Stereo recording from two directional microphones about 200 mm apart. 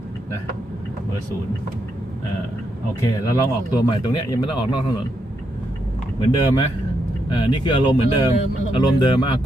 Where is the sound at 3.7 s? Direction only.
20° left (ahead or behind).